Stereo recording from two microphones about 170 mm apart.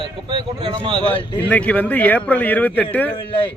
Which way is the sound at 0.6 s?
30° right (ahead or behind).